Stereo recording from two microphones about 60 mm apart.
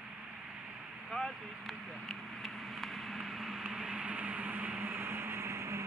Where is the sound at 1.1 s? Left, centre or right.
Centre; by 4.8 s right.